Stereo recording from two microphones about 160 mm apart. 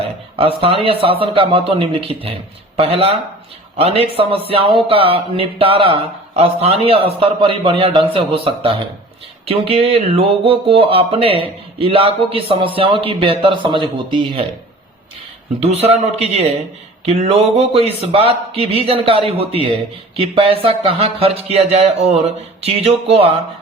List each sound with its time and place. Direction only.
0.3 s speech: 35° right (ahead or behind)
15.6 s speech: 40° right (ahead or behind)